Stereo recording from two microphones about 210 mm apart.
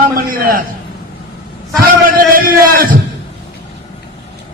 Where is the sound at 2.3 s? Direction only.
45° right (ahead or behind).